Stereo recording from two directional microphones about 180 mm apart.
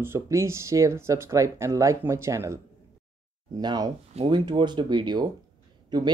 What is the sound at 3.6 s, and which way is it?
Speech, 20° right (ahead or behind).